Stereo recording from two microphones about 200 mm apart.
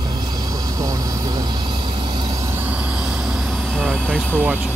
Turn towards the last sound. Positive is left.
turn(degrees=-10)  # may be behind; listen again after turning